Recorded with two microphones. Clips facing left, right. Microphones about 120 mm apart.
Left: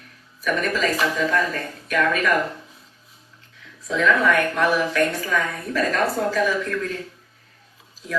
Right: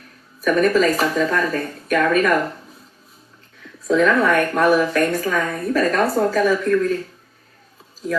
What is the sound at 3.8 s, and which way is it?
A woman's voice, 45° right (ahead or behind).